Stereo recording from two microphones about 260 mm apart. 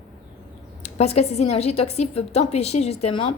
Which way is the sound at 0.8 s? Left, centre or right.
Left.